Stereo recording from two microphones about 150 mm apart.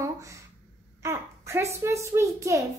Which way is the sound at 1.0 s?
15° right (ahead or behind).